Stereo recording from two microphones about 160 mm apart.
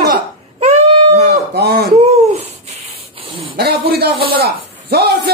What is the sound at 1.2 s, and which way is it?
Livestock, 80° right.